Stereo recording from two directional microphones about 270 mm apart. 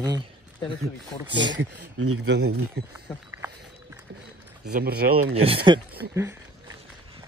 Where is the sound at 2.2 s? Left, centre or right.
Right.